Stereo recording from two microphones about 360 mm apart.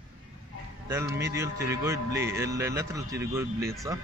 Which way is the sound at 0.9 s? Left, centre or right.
Centre.